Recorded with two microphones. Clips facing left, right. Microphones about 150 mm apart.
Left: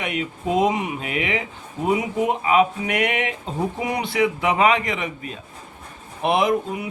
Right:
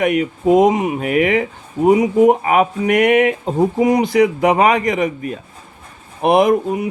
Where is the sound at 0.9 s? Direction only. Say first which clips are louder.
Right 10 dB; 50° right (ahead or behind).